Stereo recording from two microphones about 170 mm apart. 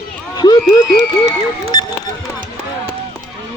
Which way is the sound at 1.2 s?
25° left (ahead or behind).